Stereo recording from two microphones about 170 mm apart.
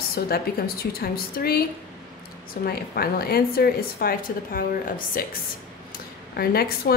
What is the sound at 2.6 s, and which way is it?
A woman's voice, 65° left (ahead or behind).